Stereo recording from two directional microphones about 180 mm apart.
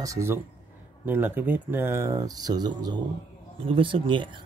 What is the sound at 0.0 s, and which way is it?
Speech, 15° right (ahead or behind).